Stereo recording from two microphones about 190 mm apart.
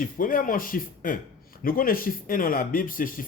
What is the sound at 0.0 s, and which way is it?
A man's voice, 45° left (ahead or behind).